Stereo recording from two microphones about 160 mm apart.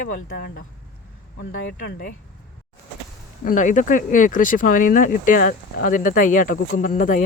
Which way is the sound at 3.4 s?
50° left (ahead or behind).